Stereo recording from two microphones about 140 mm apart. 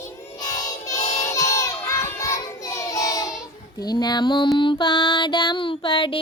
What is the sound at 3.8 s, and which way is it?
Music, 30° left (ahead or behind).